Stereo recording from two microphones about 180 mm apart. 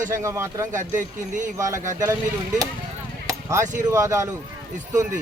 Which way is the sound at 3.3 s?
15° right (ahead or behind).